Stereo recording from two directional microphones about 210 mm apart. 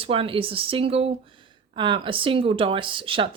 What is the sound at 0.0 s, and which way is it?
Speech, 25° right (ahead or behind).